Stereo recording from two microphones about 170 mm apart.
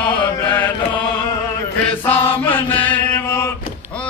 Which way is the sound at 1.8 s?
10° left (ahead or behind).